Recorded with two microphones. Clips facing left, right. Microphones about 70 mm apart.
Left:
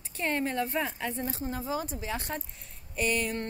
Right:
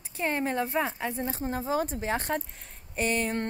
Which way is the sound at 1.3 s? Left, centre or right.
Right.